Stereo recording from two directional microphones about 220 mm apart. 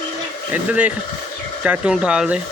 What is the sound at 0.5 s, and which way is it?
Speech, 5° right (ahead or behind).